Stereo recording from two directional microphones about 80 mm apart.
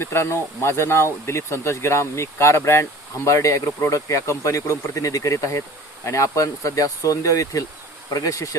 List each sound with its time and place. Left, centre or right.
0.0 s speech: left